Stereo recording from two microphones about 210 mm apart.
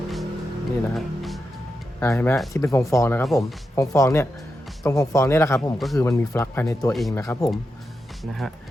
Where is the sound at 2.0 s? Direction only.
10° left (ahead or behind).